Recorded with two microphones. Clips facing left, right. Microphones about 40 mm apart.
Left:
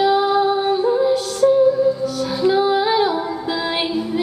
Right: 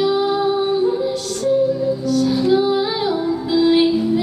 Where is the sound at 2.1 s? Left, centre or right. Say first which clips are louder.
Right 3 dB; centre.